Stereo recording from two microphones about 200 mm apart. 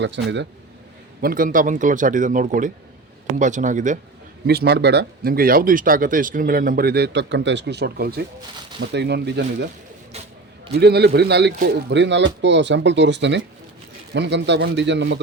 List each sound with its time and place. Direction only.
0.0 s speech: 60° right (ahead or behind)
1.2 s a man's voice: 45° right (ahead or behind)
4.4 s speech: 55° right (ahead or behind)
10.8 s speech: 55° right (ahead or behind)